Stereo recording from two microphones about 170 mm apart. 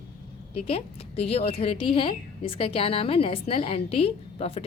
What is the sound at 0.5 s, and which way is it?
A woman's voice, 35° left (ahead or behind).